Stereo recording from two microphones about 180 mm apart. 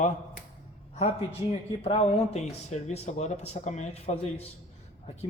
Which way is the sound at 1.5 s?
35° left (ahead or behind).